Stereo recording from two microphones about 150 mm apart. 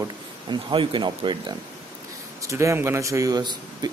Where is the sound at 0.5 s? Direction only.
35° right (ahead or behind).